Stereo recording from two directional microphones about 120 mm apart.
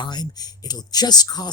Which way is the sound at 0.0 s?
35° left (ahead or behind).